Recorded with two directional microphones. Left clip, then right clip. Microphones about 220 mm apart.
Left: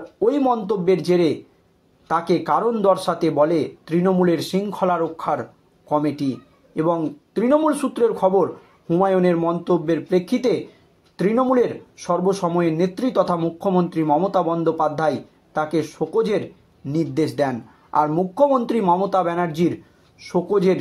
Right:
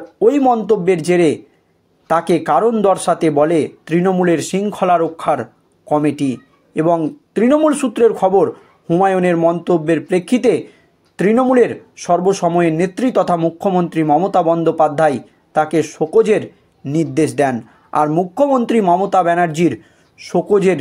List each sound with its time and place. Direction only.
0.2 s speech: 35° right (ahead or behind)